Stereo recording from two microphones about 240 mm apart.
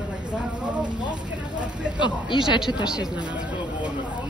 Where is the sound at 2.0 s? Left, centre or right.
Centre.